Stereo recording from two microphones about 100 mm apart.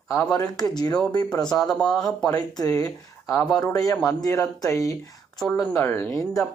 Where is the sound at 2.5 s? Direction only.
35° left (ahead or behind).